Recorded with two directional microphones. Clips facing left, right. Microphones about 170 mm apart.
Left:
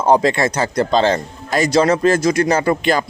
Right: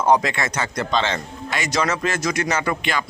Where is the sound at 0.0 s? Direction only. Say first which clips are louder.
Left 4 dB; 30° left (ahead or behind).